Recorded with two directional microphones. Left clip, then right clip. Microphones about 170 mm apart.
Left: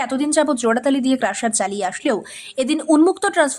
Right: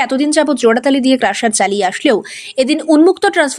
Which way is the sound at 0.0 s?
10° right (ahead or behind).